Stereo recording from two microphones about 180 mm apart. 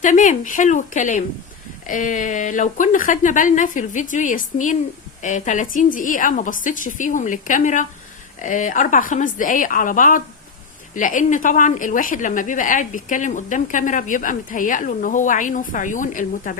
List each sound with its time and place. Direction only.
0.0 s a woman's voice: 45° left (ahead or behind)